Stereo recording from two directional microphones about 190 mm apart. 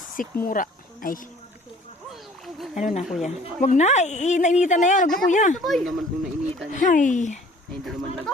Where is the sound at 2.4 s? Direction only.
Centre (ahead or behind).